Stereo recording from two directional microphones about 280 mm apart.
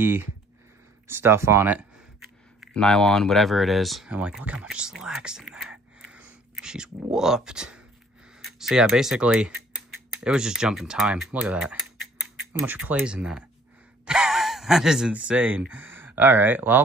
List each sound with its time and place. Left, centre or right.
0.0 s speech: centre